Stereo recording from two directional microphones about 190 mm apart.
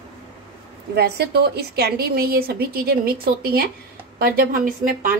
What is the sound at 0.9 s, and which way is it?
A woman's voice, 60° right (ahead or behind).